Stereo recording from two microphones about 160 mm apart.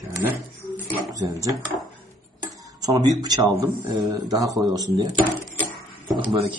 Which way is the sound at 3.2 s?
25° right (ahead or behind).